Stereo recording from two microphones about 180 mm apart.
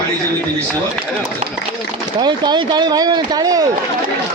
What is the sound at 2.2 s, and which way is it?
Speech, 25° right (ahead or behind).